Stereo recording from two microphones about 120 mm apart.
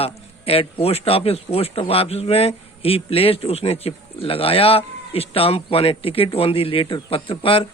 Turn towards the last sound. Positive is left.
turn(degrees=50)  # may be behind; listen again after turning